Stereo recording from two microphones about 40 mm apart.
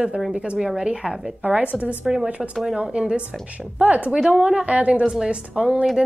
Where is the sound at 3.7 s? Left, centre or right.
Right.